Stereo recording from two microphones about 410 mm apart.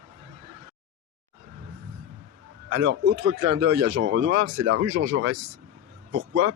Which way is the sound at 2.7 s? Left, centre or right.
Right.